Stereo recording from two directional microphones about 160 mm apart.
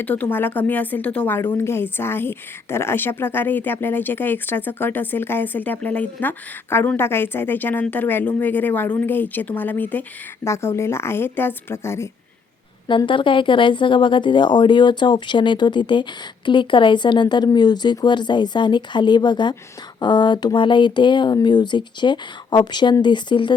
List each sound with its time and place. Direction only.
0.0 s a woman's voice: 10° left (ahead or behind)
12.9 s speech: 30° left (ahead or behind)